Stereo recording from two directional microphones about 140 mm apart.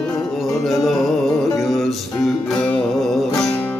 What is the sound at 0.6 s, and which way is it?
Music, centre (ahead or behind).